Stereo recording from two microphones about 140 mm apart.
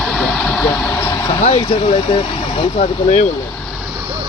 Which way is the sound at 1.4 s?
40° left (ahead or behind).